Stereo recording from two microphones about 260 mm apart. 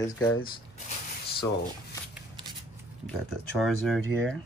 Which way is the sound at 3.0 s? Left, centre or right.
Centre.